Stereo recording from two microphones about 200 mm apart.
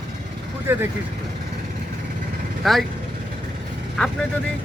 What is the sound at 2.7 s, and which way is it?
Speech, centre (ahead or behind).